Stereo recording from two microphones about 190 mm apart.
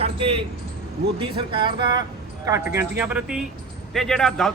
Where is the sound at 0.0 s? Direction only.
30° right (ahead or behind).